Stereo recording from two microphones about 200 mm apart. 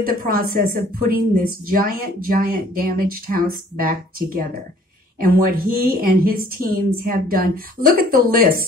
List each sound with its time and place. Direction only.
0.0 s a woman's voice: 45° right (ahead or behind)